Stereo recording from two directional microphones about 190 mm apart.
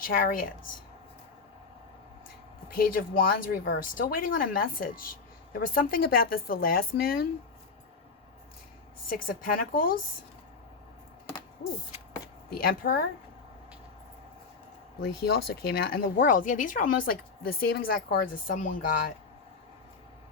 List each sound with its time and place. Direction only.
0.0 s speech: 50° left (ahead or behind)
2.6 s speech: 50° left (ahead or behind)
9.0 s speech: 50° left (ahead or behind)
12.5 s speech: 50° left (ahead or behind)
15.0 s speech: 55° left (ahead or behind)